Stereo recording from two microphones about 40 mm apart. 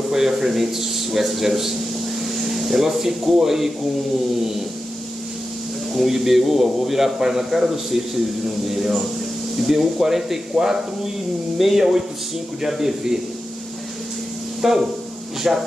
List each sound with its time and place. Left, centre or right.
0.1 s a man's voice: centre
5.9 s a man's voice: centre
14.6 s speech: centre